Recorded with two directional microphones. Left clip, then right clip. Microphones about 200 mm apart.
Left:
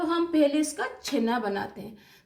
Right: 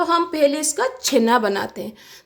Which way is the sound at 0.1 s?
60° right (ahead or behind).